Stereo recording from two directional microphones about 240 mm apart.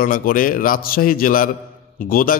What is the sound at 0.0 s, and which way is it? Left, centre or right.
A man's voice, left.